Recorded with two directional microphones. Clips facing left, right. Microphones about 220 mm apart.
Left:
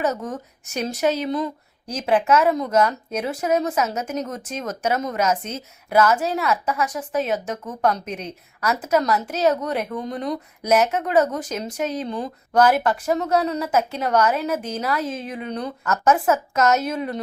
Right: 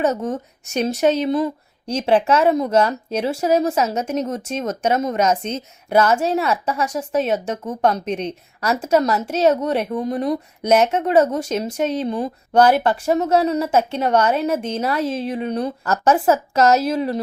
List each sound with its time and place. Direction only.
0.0 s a woman's voice: 25° right (ahead or behind)